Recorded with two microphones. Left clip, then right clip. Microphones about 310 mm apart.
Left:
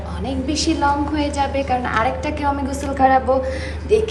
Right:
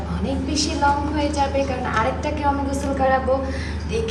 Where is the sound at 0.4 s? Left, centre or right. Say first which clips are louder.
Left 2 dB; centre.